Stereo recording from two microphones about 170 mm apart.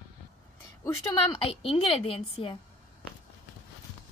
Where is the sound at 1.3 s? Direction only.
35° left (ahead or behind).